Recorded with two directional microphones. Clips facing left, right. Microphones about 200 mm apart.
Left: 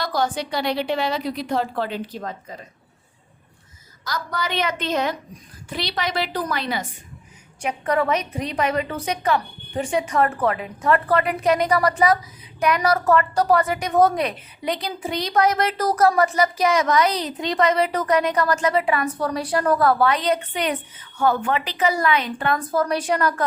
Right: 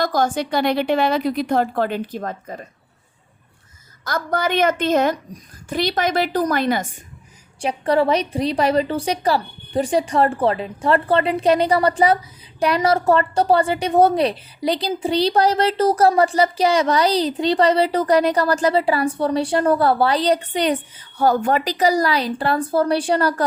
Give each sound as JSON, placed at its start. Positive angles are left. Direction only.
{"t": 0.0, "sound": "a woman's voice", "side_deg": -45}
{"t": 4.0, "sound": "a woman's voice", "side_deg": -50}
{"t": 7.6, "sound": "a woman's voice", "side_deg": -30}